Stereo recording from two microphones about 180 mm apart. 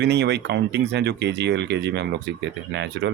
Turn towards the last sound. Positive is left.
turn(degrees=-70)  # may be behind; listen again after turning